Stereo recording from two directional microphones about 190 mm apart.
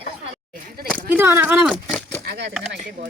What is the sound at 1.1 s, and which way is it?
Speech, 10° right (ahead or behind).